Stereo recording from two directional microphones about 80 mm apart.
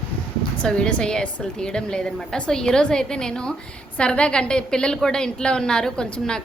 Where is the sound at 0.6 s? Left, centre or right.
Centre.